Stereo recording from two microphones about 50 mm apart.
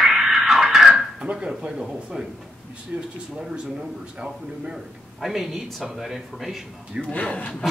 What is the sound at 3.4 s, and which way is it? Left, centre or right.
Speech, centre.